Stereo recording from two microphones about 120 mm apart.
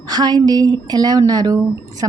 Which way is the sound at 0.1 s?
35° right (ahead or behind).